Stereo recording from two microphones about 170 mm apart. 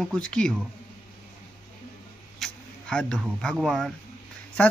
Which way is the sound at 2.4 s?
5° left (ahead or behind).